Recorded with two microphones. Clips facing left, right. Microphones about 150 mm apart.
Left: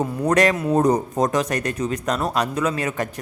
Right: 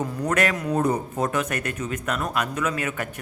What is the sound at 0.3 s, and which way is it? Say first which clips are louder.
Speech: left 6 dB; 35° left (ahead or behind).